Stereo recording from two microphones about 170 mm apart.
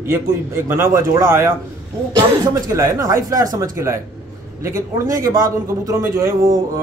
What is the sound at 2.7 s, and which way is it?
A man's voice, 20° right (ahead or behind).